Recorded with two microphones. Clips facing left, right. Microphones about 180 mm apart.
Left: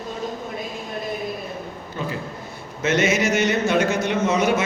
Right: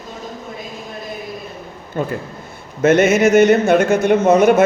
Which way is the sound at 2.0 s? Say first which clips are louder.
Right 7 dB; 50° right (ahead or behind).